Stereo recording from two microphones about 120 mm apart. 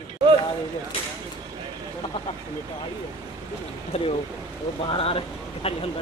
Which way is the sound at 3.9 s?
55° left (ahead or behind).